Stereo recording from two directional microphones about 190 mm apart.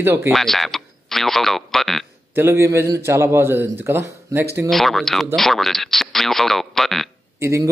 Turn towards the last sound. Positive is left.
turn(degrees=-15)  # may be behind; listen again after turning